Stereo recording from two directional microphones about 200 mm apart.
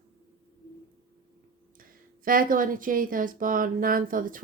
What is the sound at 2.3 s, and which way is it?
Speech, 45° right (ahead or behind).